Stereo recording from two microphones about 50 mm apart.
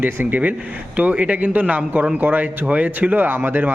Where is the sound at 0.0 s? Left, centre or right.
Right.